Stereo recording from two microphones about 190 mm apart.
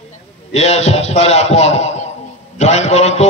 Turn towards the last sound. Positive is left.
turn(degrees=35)  # may be behind; listen again after turning